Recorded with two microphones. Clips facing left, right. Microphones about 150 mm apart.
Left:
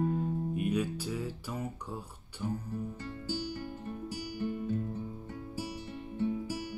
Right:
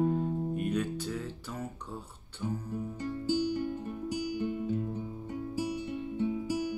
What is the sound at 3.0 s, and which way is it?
Music, 15° right (ahead or behind).